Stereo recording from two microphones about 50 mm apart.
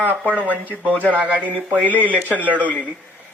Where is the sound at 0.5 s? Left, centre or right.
Right.